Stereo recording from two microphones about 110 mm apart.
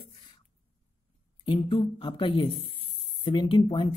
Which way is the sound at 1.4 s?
50° left (ahead or behind).